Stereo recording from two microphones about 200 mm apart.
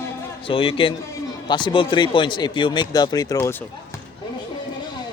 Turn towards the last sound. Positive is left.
turn(degrees=15)  # may be behind; listen again after turning